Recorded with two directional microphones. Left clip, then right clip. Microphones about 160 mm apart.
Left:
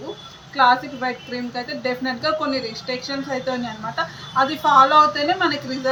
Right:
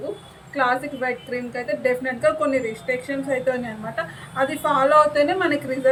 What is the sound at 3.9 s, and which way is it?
A woman's voice, 15° right (ahead or behind).